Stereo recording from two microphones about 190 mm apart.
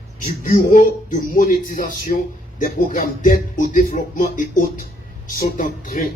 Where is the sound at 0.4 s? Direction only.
45° left (ahead or behind).